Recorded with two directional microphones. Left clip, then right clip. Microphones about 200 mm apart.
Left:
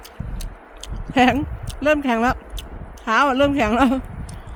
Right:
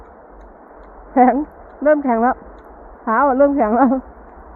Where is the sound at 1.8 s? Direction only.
25° left (ahead or behind).